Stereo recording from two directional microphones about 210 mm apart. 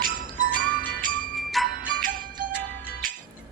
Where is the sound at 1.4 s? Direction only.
Centre (ahead or behind).